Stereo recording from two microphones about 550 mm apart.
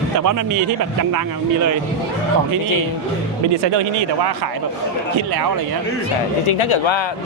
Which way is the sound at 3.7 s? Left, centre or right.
Right.